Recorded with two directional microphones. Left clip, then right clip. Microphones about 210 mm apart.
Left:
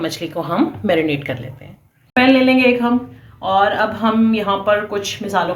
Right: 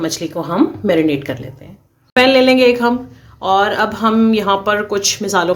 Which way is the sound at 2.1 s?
55° right (ahead or behind).